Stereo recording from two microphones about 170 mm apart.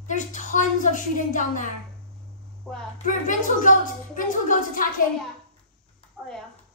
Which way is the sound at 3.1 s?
50° left (ahead or behind).